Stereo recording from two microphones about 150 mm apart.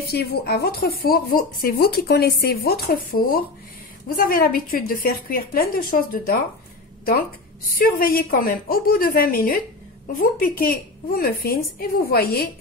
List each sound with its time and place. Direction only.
0.1 s a woman's voice: 90° left; by 6.3 s 75° left (ahead or behind)
7.7 s a woman's voice: 75° left (ahead or behind); by 12.4 s 90° left